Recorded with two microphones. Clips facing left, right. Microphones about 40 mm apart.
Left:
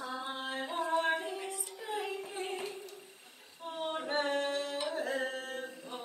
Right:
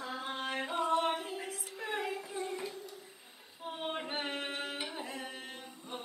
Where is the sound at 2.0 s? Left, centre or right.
Centre.